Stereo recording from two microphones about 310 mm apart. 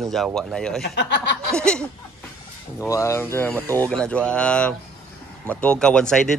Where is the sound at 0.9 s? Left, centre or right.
Left.